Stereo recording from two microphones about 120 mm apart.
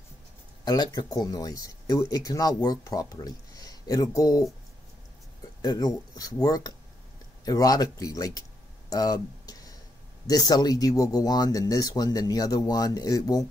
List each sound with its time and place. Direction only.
0.7 s speech: 35° left (ahead or behind)
5.6 s speech: 30° left (ahead or behind)
8.9 s a sound: 30° left (ahead or behind)
10.2 s speech: 35° left (ahead or behind)